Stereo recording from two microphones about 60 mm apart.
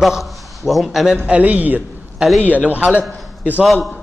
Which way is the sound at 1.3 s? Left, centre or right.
Right.